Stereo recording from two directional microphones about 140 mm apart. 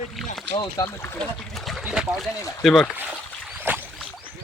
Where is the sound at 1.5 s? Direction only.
Centre (ahead or behind).